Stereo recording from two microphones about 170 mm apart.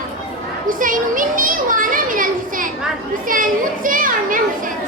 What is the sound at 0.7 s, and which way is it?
Children playing, 50° right (ahead or behind).